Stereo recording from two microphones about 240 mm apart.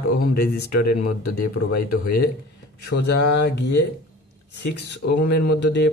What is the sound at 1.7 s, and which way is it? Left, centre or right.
Speech, left.